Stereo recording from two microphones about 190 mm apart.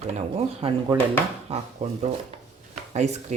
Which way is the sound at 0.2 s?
30° right (ahead or behind).